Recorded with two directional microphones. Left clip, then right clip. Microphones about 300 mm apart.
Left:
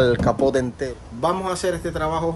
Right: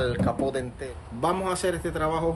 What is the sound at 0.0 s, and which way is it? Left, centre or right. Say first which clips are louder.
Speech: left 8 dB; left.